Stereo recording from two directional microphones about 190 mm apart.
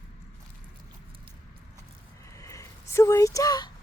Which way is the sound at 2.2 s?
15° left (ahead or behind).